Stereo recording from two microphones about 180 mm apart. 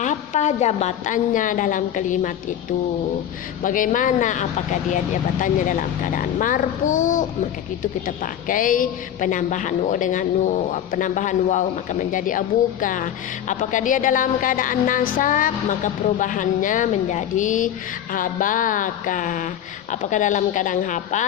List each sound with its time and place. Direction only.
0.0 s a woman's voice: 40° left (ahead or behind)
3.6 s a woman's voice: 45° left (ahead or behind)